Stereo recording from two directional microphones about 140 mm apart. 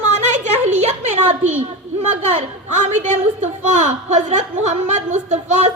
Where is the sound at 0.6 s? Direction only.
55° right (ahead or behind).